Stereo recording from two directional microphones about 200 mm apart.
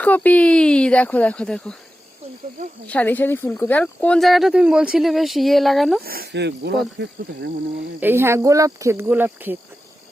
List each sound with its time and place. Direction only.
0.0 s speech: 10° left (ahead or behind)
2.8 s speech: 5° left (ahead or behind)
6.0 s speech: 50° right (ahead or behind)
8.0 s speech: 10° right (ahead or behind)